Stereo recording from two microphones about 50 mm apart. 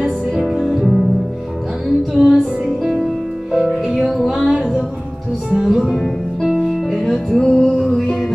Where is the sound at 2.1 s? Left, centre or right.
Centre.